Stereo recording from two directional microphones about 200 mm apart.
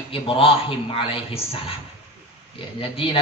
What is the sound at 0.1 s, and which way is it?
A man's voice, 25° left (ahead or behind).